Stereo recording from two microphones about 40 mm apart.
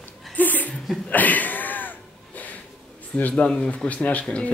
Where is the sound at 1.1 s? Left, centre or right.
Left.